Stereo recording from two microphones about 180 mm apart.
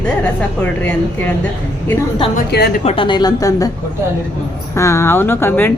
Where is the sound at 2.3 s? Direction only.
65° left (ahead or behind).